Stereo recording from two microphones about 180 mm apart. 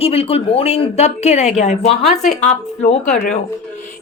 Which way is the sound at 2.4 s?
40° left (ahead or behind).